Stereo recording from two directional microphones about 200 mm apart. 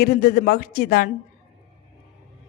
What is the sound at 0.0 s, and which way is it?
Speech, 50° left (ahead or behind).